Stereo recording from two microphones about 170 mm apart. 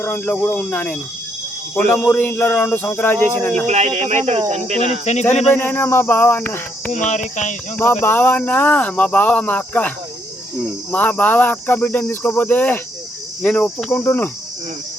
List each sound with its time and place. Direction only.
0.0 s speech: 10° left (ahead or behind)
3.7 s speech: 40° right (ahead or behind)
5.5 s speech: 10° left (ahead or behind)
6.9 s speech: 45° left (ahead or behind)
7.8 s speech: 10° left (ahead or behind)
10.9 s speech: 10° left (ahead or behind)
13.4 s cricket: 5° left (ahead or behind)
13.9 s speech: 15° left (ahead or behind)